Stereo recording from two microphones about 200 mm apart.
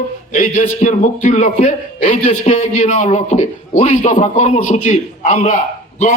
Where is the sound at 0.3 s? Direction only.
35° left (ahead or behind).